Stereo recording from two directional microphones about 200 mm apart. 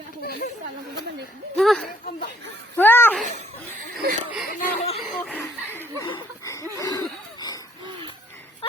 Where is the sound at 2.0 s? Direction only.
40° left (ahead or behind).